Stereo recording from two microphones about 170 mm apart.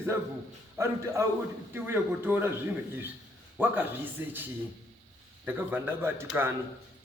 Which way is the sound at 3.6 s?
10° right (ahead or behind).